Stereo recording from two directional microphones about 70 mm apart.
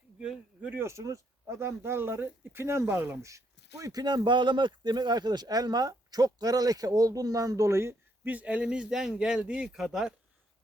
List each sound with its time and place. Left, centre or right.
0.2 s speech: centre
0.7 s speech: right
3.2 s speech: right
4.0 s speech: right
8.2 s a man's voice: right